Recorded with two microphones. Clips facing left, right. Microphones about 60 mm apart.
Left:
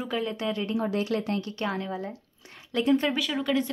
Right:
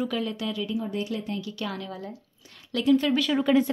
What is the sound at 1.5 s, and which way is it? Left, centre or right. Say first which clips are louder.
A woman's voice: left 3 dB; left.